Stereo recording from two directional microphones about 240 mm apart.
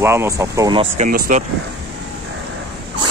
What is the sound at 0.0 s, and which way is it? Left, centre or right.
Speech, centre.